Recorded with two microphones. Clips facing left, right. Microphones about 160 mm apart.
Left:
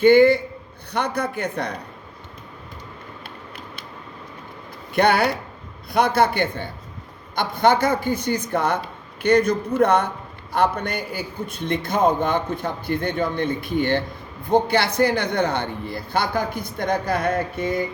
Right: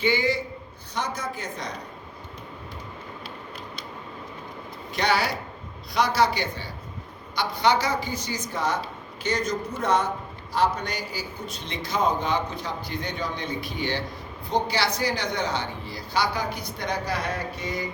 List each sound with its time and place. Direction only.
0.0 s a man's voice: 55° left (ahead or behind)
4.9 s a man's voice: 55° left (ahead or behind)